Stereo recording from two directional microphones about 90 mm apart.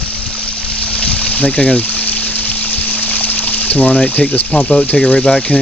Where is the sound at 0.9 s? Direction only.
10° left (ahead or behind).